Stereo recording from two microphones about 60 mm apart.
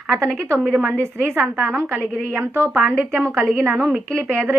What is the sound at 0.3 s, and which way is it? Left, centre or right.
A woman's voice, right.